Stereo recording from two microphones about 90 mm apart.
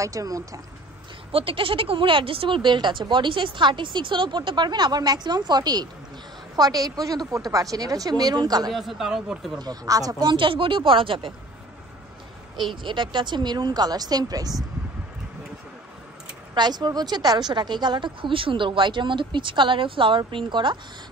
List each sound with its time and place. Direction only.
0.0 s speech: 40° right (ahead or behind)
1.3 s a woman's voice: 85° right; by 8.7 s 50° right (ahead or behind)
8.7 s speech: 5° right (ahead or behind)
9.6 s speech: 45° right (ahead or behind); by 11.3 s 75° right (ahead or behind)
12.8 s a woman's voice: 65° right (ahead or behind); by 14.5 s 45° right (ahead or behind)
16.5 s speech: 50° right (ahead or behind)